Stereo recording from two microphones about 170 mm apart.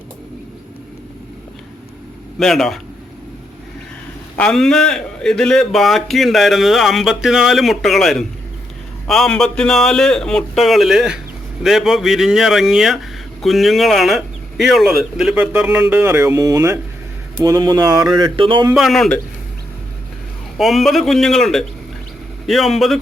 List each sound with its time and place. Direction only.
2.4 s a man's voice: centre (ahead or behind)
4.4 s a man's voice: 5° left (ahead or behind); by 18.7 s 30° right (ahead or behind)
18.7 s a man's voice: centre (ahead or behind)
20.6 s a man's voice: centre (ahead or behind)